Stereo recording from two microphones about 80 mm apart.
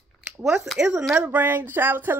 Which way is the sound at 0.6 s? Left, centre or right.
Centre.